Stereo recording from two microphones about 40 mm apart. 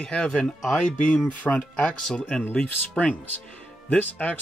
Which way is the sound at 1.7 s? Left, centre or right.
Left.